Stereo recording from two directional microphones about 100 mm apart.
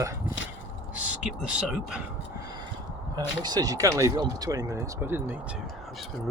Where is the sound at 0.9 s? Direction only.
15° right (ahead or behind).